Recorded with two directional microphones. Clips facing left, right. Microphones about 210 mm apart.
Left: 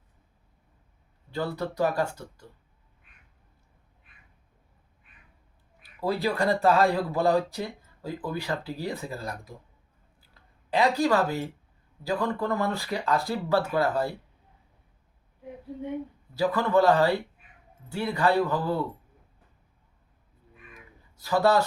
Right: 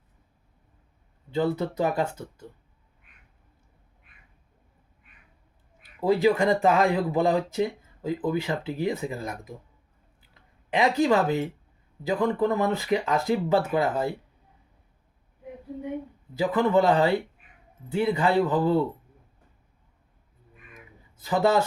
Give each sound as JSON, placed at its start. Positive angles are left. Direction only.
{"t": 1.3, "sound": "speech", "side_deg": -20}
{"t": 6.0, "sound": "speech", "side_deg": -15}
{"t": 10.2, "sound": "a sound", "side_deg": -20}
{"t": 12.0, "sound": "speech", "side_deg": -15}
{"t": 16.3, "sound": "speech", "side_deg": -20}
{"t": 21.2, "sound": "speech", "side_deg": -20}